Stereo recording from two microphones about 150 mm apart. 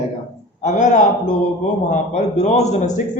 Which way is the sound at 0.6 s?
55° left (ahead or behind).